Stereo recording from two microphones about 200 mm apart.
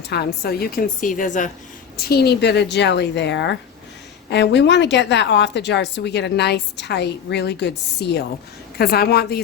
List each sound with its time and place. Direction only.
0.1 s a woman's voice: 55° left (ahead or behind)
2.0 s a woman's voice: 50° left (ahead or behind)